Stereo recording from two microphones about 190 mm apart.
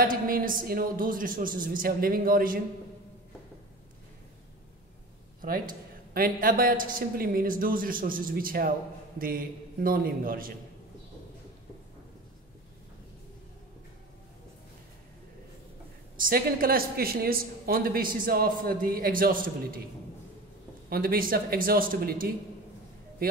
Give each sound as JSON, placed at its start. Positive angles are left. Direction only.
{"t": 0.0, "sound": "a woman's voice", "side_deg": -50}
{"t": 5.4, "sound": "a woman's voice", "side_deg": -45}
{"t": 16.2, "sound": "a woman's voice", "side_deg": -50}
{"t": 20.9, "sound": "a woman's voice", "side_deg": -50}